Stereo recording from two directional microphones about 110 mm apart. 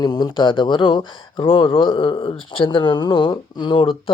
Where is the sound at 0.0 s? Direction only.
40° left (ahead or behind).